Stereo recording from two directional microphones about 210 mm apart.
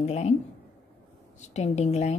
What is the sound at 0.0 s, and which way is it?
Speech, 30° left (ahead or behind).